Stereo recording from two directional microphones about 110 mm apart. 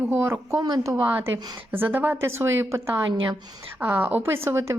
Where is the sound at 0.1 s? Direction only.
20° right (ahead or behind).